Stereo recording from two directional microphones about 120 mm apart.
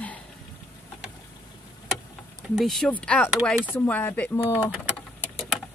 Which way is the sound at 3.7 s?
15° left (ahead or behind).